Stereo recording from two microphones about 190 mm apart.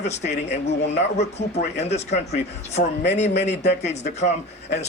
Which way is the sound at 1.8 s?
35° left (ahead or behind).